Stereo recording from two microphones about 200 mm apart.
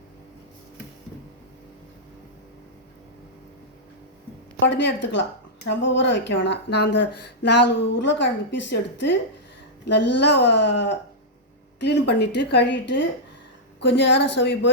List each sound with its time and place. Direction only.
4.7 s a woman's voice: 60° left (ahead or behind)